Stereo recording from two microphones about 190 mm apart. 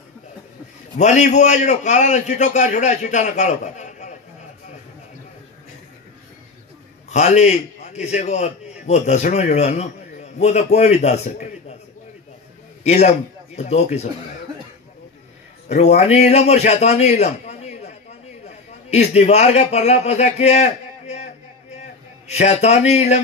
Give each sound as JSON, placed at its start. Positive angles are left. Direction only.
{"t": 0.9, "sound": "a man's voice", "side_deg": 40}
{"t": 7.1, "sound": "a man's voice", "side_deg": 35}
{"t": 12.8, "sound": "a man's voice", "side_deg": 35}
{"t": 15.7, "sound": "a man's voice", "side_deg": 35}